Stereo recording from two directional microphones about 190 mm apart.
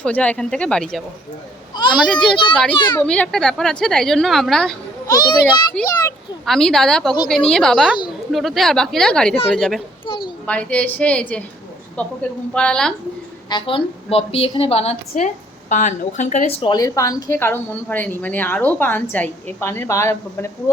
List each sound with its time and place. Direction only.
0.0 s a woman's voice: 5° left (ahead or behind)
2.3 s a child's voice: 25° left (ahead or behind)
3.0 s a woman's voice: 5° left (ahead or behind)
5.0 s a child's voice: 20° left (ahead or behind)
6.4 s a woman's voice: centre (ahead or behind)
10.1 s a sound: 25° left (ahead or behind)
10.4 s a woman's voice: 5° left (ahead or behind)
13.5 s a woman's voice: 25° left (ahead or behind)
16.7 s speech: 15° left (ahead or behind)